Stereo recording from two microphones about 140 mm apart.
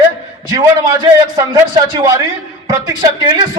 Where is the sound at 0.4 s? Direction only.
30° right (ahead or behind).